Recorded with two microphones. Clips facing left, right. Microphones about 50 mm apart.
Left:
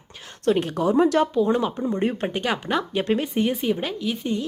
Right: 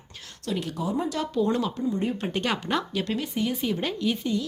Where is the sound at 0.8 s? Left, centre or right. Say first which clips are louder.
Left 11 dB; left.